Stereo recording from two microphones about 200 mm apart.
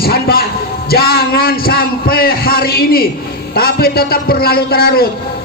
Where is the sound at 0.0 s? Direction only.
50° left (ahead or behind).